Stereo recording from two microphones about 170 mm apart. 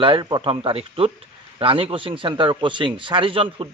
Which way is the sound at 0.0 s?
30° right (ahead or behind).